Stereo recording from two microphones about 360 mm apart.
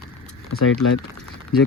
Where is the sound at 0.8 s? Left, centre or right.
Left.